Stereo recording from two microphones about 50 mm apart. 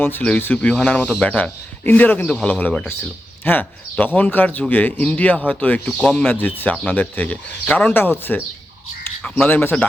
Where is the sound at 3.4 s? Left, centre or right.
Left.